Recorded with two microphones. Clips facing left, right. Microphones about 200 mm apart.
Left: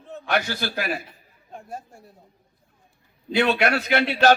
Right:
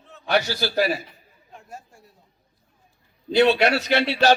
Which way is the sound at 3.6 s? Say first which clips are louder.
Right 1 dB; 50° left (ahead or behind).